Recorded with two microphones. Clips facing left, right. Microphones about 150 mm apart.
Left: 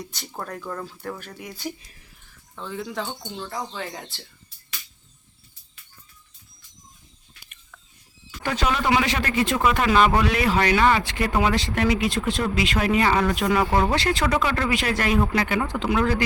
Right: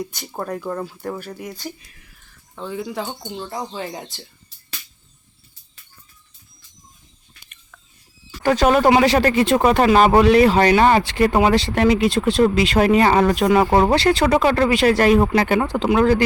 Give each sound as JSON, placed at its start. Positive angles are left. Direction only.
{"t": 0.0, "sound": "speech", "side_deg": -10}
{"t": 2.6, "sound": "speech", "side_deg": -10}
{"t": 8.4, "sound": "speech", "side_deg": -45}